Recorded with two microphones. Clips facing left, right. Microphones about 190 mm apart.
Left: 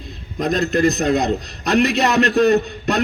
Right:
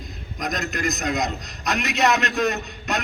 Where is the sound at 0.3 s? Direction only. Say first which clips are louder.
Left 10 dB; 30° left (ahead or behind).